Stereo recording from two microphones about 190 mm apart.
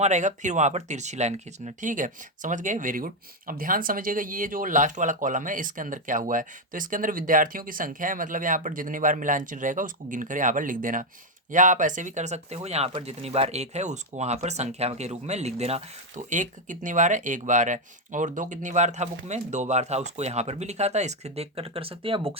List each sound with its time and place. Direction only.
0.0 s speech: 40° right (ahead or behind)